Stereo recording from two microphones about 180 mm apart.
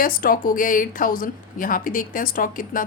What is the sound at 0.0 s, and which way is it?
A woman's voice, 50° left (ahead or behind).